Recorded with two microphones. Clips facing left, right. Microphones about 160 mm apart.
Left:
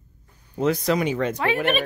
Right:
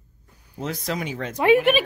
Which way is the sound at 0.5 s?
75° left (ahead or behind).